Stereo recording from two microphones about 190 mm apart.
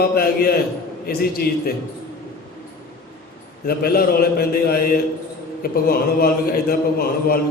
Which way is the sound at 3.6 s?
50° left (ahead or behind).